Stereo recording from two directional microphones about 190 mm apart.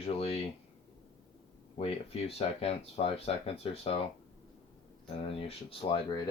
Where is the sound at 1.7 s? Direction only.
30° left (ahead or behind).